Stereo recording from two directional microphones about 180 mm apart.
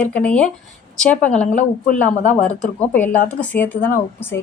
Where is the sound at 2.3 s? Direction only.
40° left (ahead or behind).